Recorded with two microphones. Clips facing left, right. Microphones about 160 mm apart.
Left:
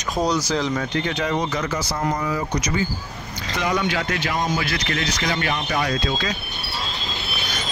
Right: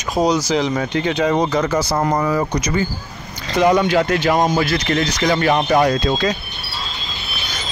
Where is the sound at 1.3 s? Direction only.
40° right (ahead or behind).